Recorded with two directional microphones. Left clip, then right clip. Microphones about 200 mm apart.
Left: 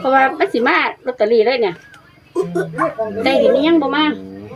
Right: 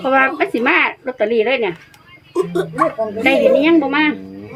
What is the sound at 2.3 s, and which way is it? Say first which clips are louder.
Speech: right 1 dB; 10° right (ahead or behind).